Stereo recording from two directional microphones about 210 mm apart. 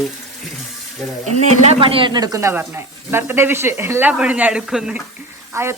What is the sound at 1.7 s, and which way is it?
Speech, 25° right (ahead or behind).